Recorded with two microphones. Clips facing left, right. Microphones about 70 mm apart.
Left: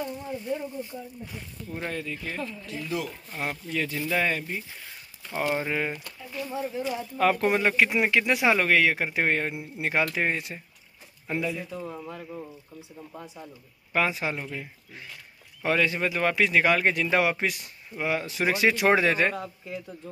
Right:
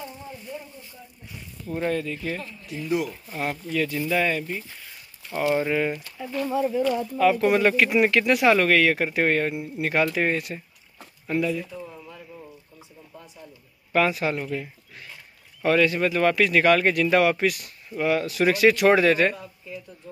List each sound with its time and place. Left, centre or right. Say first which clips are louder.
1.9 s speech: right 7 dB; centre
2.6 s speech: right 8 dB; right
3.3 s speech: right 3 dB; centre
3.7 s speech: right 3 dB; left
6.1 s speech: right 7 dB; right
7.2 s speech: right 2 dB; left
7.5 s speech: right 4 dB; centre
13.9 s speech: right 4 dB; centre
15.6 s speech: right 5 dB; left